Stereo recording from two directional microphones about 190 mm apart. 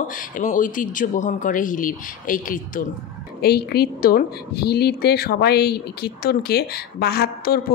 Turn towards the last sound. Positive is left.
turn(degrees=55)  # may be behind; listen again after turning